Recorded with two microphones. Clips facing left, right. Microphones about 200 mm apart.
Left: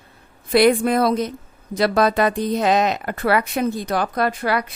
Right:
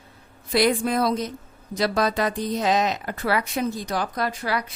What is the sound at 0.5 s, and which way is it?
Speech, 60° left (ahead or behind).